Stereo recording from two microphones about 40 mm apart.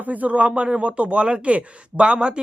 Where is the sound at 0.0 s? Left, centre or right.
Right.